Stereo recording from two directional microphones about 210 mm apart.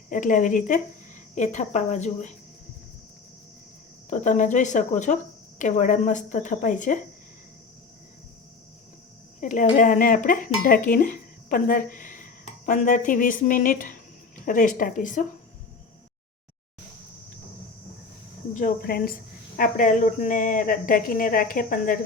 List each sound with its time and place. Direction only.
0.1 s speech: 35° left (ahead or behind)
4.1 s speech: 35° left (ahead or behind)
9.4 s speech: 35° left (ahead or behind)
18.5 s speech: 45° left (ahead or behind)